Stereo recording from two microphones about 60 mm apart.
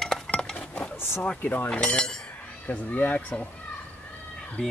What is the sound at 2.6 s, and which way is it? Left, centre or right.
Speech, left.